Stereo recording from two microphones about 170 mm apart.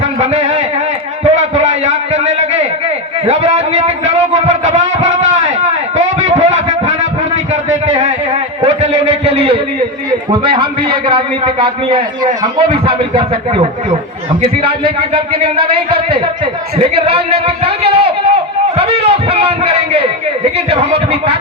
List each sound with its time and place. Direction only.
0.0 s music: 45° right (ahead or behind)
1.2 s a sound: 45° right (ahead or behind)
3.2 s a man's voice: 40° right (ahead or behind)
6.1 s a sound: 45° right (ahead or behind)
10.1 s a man's voice: 30° right (ahead or behind)
14.8 s a man's voice: 30° right (ahead or behind)